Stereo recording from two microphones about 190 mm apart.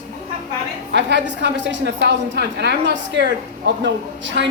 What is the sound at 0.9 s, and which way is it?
A woman's voice, 65° right (ahead or behind).